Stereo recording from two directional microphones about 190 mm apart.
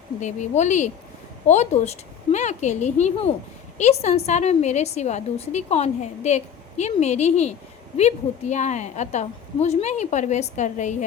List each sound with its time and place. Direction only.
0.2 s a woman's voice: 40° left (ahead or behind)